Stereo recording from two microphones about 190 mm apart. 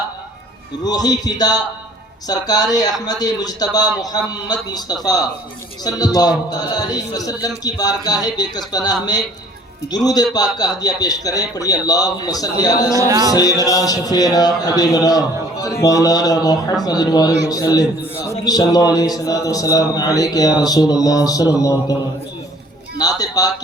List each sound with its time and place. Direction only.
0.9 s a man's voice: 20° left (ahead or behind)
6.1 s a man's voice: 20° left (ahead or behind)
13.0 s speech: 20° right (ahead or behind)
13.3 s a man's voice: 20° left (ahead or behind)
21.6 s mantra: 20° left (ahead or behind)
23.0 s a man's voice: 20° left (ahead or behind)